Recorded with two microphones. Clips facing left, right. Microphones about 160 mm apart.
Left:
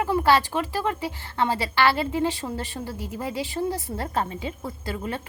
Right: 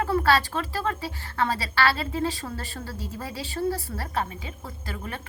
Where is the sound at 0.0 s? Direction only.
20° left (ahead or behind).